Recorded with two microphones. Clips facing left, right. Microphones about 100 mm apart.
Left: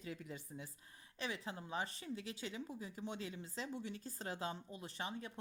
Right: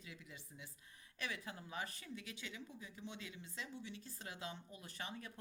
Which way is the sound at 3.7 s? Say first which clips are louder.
Left 5 dB; 45° left (ahead or behind).